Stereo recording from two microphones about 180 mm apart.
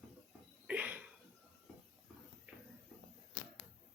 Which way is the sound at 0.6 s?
10° right (ahead or behind).